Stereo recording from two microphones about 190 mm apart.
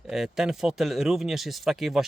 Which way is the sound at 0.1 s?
Centre (ahead or behind).